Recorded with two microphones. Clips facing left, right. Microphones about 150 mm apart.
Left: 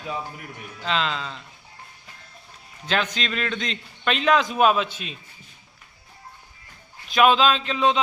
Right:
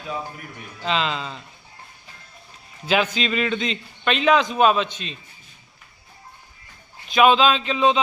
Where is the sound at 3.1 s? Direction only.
5° right (ahead or behind).